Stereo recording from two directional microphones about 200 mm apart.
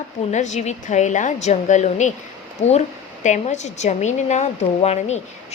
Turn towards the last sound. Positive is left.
turn(degrees=35)  # may be behind; listen again after turning